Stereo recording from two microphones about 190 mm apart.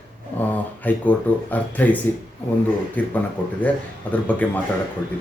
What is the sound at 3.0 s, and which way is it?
Speech, 10° left (ahead or behind).